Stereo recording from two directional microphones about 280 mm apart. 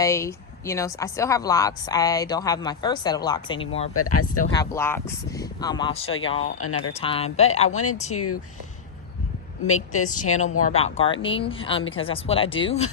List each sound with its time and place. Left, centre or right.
0.0 s speech: centre
3.9 s speech: left
4.5 s speech: centre
6.0 s speech: left
7.0 s speech: left
8.1 s speech: left
9.6 s speech: left
10.0 s speech: left